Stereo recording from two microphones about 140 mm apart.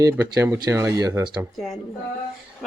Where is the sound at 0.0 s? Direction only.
20° right (ahead or behind).